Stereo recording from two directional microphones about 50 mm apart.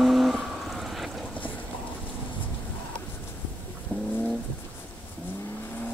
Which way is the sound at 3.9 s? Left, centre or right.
Left.